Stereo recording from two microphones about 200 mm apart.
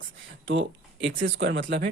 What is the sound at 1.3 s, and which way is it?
Speech, 65° right (ahead or behind).